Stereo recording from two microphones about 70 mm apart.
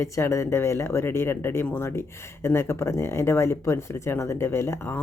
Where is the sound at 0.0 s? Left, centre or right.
Left.